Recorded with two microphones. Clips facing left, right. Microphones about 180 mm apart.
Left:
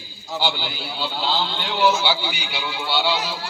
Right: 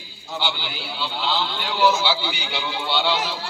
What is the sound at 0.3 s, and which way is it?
Speech, 40° left (ahead or behind).